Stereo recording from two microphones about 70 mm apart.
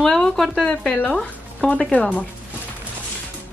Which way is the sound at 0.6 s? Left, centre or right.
Centre.